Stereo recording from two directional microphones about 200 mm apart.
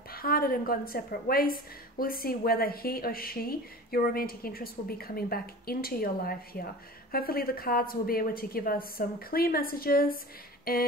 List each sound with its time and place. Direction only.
0.1 s a woman's voice: 50° left (ahead or behind)